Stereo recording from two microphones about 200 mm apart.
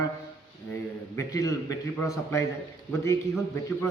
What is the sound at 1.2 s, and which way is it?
A man's voice, 15° left (ahead or behind).